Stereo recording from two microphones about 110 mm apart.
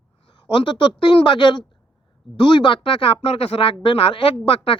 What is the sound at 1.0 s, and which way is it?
Speech, 50° left (ahead or behind).